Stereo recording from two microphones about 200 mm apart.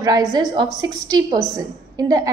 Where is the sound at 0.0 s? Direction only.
15° right (ahead or behind).